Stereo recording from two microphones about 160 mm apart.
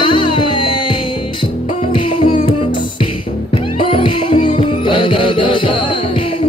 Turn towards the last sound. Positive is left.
turn(degrees=30)  # may be behind; listen again after turning